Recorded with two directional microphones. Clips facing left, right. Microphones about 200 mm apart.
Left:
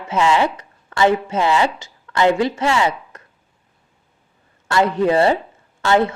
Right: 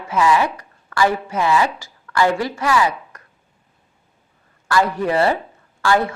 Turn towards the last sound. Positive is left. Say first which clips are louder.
# left 2 dB
turn(degrees=20)  # may be behind; listen again after turning